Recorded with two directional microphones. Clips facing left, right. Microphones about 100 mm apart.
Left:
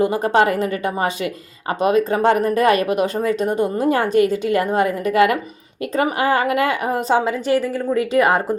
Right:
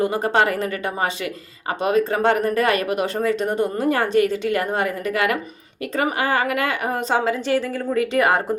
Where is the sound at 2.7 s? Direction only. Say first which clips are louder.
Left 4 dB; 20° left (ahead or behind).